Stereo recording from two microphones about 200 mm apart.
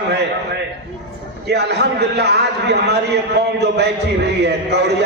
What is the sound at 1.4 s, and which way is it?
A man's voice, 55° right (ahead or behind).